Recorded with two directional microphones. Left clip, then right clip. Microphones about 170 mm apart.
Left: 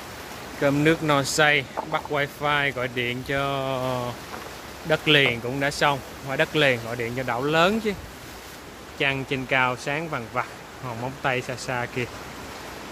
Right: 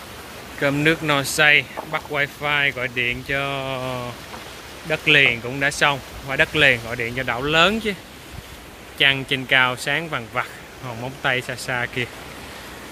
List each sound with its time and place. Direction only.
0.6 s speech: 5° left (ahead or behind)
8.9 s speech: centre (ahead or behind)